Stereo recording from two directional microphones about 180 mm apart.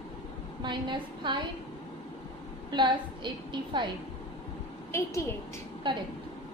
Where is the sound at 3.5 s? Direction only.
25° right (ahead or behind).